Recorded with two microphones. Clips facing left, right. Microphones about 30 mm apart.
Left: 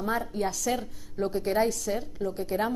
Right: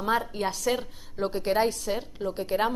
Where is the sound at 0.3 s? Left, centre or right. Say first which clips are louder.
Right 1 dB; right.